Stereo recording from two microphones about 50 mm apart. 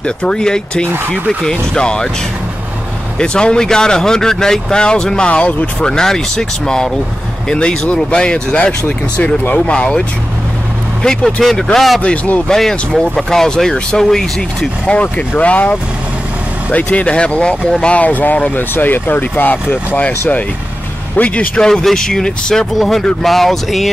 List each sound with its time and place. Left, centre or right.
0.0 s speech: centre
3.2 s speech: centre
11.3 s speech: centre
12.0 s speech: left
12.4 s speech: centre
14.9 s speech: left
21.5 s speech: centre